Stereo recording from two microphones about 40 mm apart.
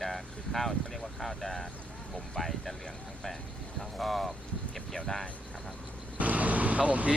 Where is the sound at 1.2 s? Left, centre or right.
Centre.